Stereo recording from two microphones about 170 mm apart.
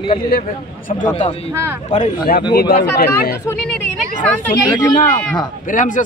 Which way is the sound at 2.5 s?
65° left (ahead or behind).